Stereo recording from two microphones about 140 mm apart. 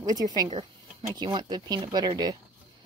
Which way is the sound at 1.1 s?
30° right (ahead or behind).